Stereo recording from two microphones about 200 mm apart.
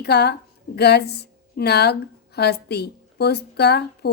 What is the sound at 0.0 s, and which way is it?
A woman's voice, 55° left (ahead or behind).